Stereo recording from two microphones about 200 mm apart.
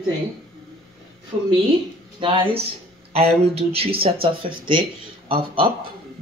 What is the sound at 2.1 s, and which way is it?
Speech, 25° right (ahead or behind).